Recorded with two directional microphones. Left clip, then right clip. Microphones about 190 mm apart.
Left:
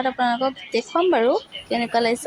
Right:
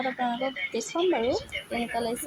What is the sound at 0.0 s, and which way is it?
Speech, 20° left (ahead or behind).